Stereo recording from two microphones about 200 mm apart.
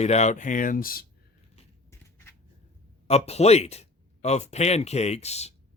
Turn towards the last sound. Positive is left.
turn(degrees=30)  # may be behind; listen again after turning